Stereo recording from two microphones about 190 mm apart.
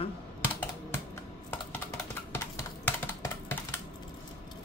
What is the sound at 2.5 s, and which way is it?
Typing, 15° left (ahead or behind).